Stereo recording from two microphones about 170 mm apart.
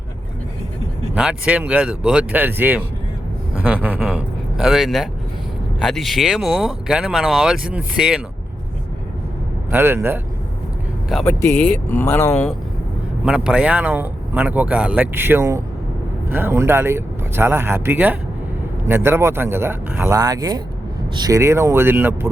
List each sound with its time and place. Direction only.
1.1 s speech: 5° right (ahead or behind)
9.7 s speech: 10° right (ahead or behind)
11.3 s speech: 10° left (ahead or behind)
13.2 s speech: 5° right (ahead or behind)